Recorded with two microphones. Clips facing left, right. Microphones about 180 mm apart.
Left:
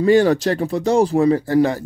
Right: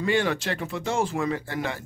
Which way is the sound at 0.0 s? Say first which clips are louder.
Left 11 dB; 40° left (ahead or behind).